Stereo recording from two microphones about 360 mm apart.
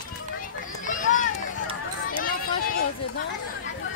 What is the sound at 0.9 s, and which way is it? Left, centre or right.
Run, left.